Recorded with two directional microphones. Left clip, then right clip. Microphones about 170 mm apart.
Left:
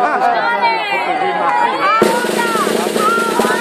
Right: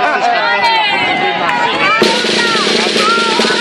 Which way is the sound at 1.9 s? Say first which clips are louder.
Right 2 dB; 50° right (ahead or behind).